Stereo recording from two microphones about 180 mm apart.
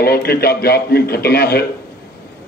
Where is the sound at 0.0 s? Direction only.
60° left (ahead or behind).